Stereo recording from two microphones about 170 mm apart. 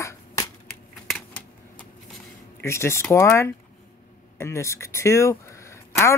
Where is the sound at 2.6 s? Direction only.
15° left (ahead or behind).